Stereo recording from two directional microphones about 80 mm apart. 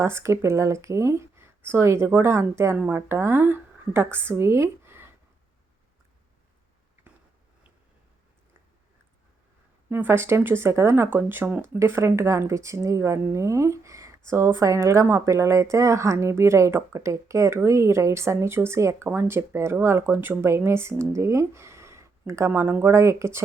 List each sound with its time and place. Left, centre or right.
0.0 s speech: right
9.9 s speech: right